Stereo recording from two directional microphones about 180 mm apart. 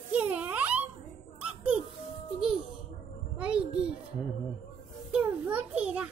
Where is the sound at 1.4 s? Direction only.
5° right (ahead or behind).